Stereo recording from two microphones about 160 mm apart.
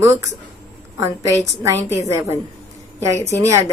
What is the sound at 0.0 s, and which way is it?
A woman's voice, 20° right (ahead or behind).